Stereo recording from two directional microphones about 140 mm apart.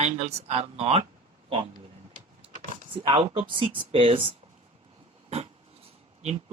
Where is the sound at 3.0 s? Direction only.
40° right (ahead or behind).